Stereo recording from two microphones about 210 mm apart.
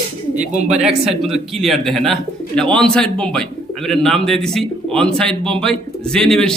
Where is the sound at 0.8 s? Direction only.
Centre (ahead or behind).